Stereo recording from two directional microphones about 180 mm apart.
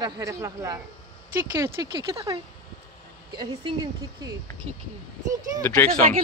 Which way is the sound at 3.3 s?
25° right (ahead or behind).